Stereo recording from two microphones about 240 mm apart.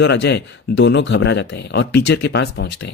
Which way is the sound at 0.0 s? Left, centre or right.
Left.